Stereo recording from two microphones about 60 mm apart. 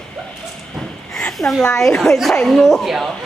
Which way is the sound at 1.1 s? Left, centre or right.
Centre.